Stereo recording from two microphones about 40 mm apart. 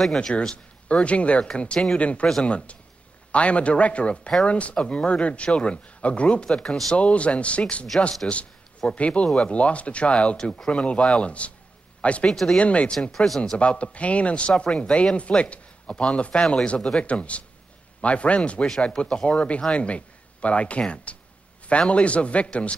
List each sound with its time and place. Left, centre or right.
0.0 s speech: centre
1.0 s a man's voice: left
6.5 s speech: centre
7.0 s a man's voice: left
10.3 s speech: centre
10.7 s a man's voice: left
12.3 s speech: centre
12.5 s a man's voice: left
13.1 s speech: centre
13.6 s a man's voice: left
16.3 s speech: centre
16.6 s a man's voice: left